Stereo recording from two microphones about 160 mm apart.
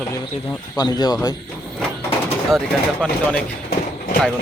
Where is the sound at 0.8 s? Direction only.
25° left (ahead or behind).